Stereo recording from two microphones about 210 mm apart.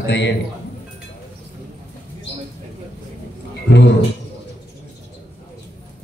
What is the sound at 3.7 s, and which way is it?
Speech, 55° left (ahead or behind).